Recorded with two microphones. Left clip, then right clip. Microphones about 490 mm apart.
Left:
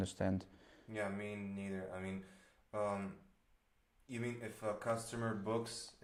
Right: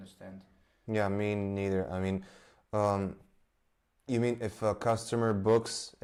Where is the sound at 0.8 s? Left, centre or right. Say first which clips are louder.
Right 12 dB; right.